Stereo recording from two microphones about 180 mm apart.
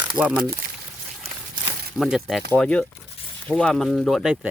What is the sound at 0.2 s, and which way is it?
Speech, 5° right (ahead or behind).